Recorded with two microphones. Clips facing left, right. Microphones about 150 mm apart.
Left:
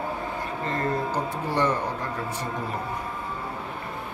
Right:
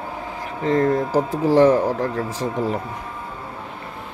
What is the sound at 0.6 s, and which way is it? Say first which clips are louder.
Speech: right 10 dB; 90° right.